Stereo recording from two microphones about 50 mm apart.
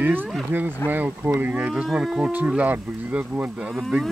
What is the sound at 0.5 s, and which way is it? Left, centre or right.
Speech, right.